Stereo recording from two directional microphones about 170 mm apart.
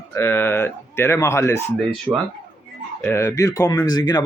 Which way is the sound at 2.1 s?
15° right (ahead or behind).